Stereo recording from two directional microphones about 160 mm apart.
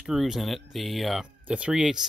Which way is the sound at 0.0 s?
Centre (ahead or behind).